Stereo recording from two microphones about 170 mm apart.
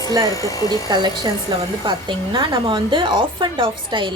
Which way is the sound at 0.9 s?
25° right (ahead or behind).